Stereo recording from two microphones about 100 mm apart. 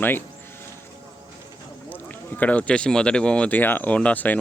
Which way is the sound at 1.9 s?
15° left (ahead or behind).